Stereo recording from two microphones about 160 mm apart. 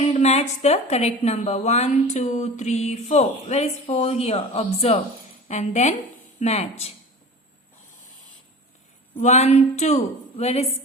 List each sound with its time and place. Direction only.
0.0 s a woman's voice: 40° left (ahead or behind)
9.1 s a woman's voice: 45° left (ahead or behind)